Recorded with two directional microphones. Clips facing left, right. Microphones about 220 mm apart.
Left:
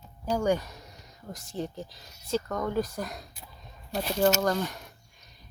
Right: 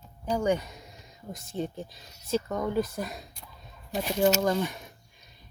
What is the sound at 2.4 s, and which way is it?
Speech, 5° right (ahead or behind).